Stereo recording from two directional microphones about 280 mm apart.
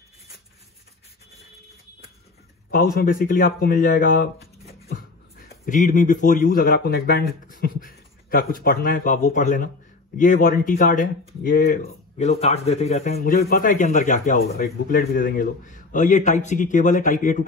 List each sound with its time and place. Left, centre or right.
2.7 s speech: left
5.7 s speech: left